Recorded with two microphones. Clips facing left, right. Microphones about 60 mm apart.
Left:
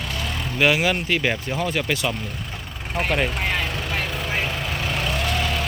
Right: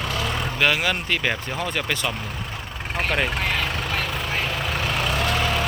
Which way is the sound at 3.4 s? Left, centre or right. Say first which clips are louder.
Even; centre.